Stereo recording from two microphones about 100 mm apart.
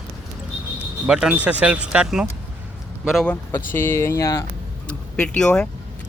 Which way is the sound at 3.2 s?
20° left (ahead or behind).